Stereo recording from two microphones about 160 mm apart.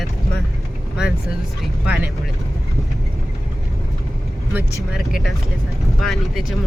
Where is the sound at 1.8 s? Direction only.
10° right (ahead or behind).